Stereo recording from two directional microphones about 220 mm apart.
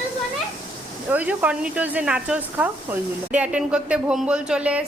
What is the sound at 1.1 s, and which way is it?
Speech, 5° right (ahead or behind).